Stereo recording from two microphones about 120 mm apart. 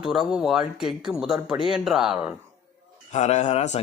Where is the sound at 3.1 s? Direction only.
70° left (ahead or behind).